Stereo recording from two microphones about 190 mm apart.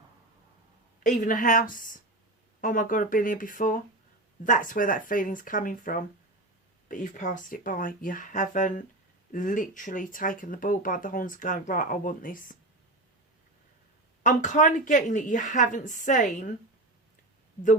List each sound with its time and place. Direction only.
1.0 s speech: 40° left (ahead or behind)
14.3 s speech: 40° left (ahead or behind)